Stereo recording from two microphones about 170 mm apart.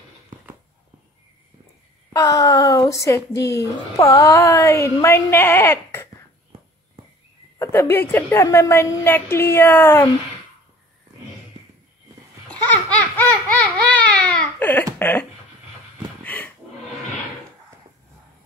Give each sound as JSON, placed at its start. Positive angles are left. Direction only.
{"t": 2.1, "sound": "a woman's voice", "side_deg": 20}
{"t": 7.5, "sound": "a woman's voice", "side_deg": 15}
{"t": 12.4, "sound": "baby laughter", "side_deg": 10}
{"t": 13.5, "sound": "baby cry", "side_deg": 10}
{"t": 15.0, "sound": "a sound", "side_deg": 10}
{"t": 16.3, "sound": "music", "side_deg": 10}